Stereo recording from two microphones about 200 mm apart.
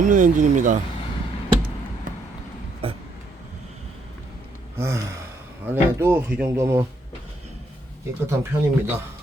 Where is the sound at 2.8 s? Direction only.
30° right (ahead or behind).